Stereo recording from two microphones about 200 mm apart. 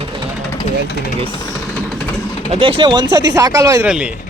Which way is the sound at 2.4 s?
25° right (ahead or behind).